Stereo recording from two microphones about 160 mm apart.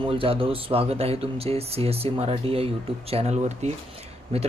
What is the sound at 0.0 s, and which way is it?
Speech, 35° right (ahead or behind).